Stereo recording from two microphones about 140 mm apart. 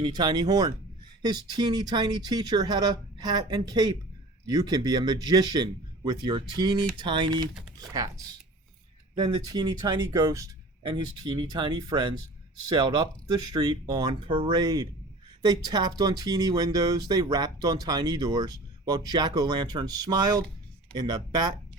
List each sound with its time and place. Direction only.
0.0 s speech: 30° right (ahead or behind)